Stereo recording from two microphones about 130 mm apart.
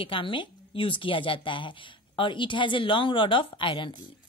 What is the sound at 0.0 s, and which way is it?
A woman's voice, 40° left (ahead or behind).